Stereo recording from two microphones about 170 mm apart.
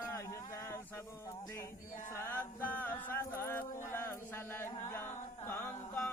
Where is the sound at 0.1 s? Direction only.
15° left (ahead or behind).